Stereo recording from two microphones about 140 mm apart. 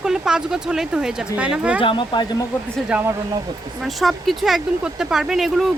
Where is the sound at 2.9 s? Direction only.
15° right (ahead or behind).